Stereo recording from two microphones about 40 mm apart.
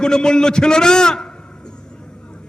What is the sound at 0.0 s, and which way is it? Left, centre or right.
A man's voice, centre.